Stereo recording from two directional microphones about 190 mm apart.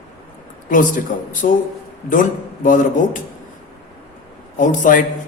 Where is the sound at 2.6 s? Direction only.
45° left (ahead or behind).